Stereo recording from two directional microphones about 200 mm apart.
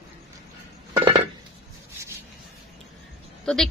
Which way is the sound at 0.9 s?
25° right (ahead or behind).